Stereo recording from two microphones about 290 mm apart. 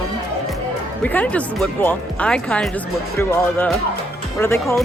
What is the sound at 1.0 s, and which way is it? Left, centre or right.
Speech, centre.